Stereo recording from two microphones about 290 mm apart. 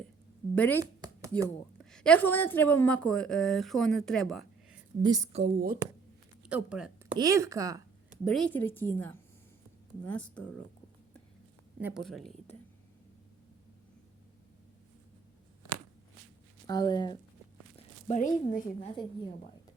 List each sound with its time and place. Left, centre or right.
0.5 s speech: centre
0.8 s a sound: centre
1.8 s a woman's voice: centre
5.0 s a woman's voice: centre
6.4 s speech: centre
8.2 s a woman's voice: centre
11.8 s a woman's voice: centre
16.6 s speech: centre
17.7 s speech: left